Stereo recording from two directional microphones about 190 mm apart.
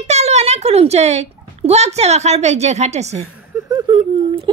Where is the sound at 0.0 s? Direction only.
35° right (ahead or behind).